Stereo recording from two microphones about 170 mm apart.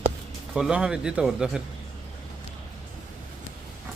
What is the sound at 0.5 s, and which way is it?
Speech, 5° right (ahead or behind).